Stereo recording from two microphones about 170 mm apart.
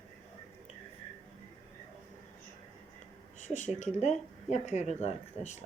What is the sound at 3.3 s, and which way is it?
Speech, 45° left (ahead or behind).